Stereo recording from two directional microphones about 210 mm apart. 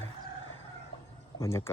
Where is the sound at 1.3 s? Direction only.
15° left (ahead or behind).